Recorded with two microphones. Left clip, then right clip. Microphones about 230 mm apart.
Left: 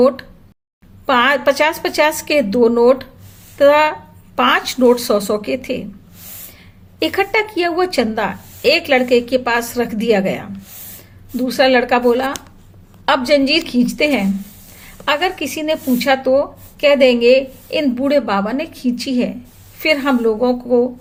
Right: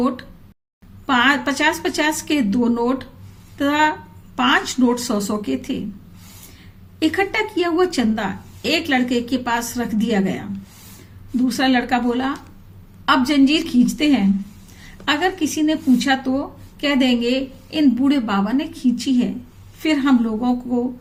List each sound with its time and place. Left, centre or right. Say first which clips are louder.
1.0 s a woman's voice: left 4 dB; centre
7.0 s a woman's voice: left 3 dB; centre